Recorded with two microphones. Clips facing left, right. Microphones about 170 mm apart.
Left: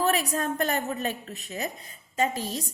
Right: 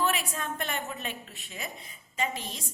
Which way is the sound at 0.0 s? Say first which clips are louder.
Left 5 dB; 40° left (ahead or behind).